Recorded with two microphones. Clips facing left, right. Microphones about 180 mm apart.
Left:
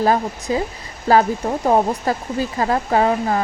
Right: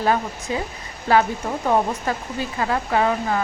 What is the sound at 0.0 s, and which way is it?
Speech, 35° left (ahead or behind).